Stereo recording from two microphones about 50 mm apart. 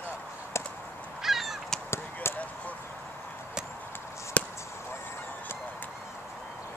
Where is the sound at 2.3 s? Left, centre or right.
Left.